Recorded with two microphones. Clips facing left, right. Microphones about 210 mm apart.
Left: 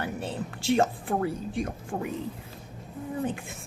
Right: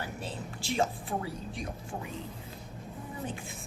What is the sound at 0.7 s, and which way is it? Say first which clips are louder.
Speech: left 6 dB; 55° left (ahead or behind).